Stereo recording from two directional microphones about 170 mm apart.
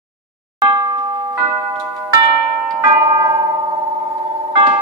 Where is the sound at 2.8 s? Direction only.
25° right (ahead or behind).